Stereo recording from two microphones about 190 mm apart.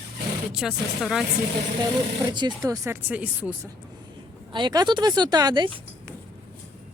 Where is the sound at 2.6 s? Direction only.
15° right (ahead or behind).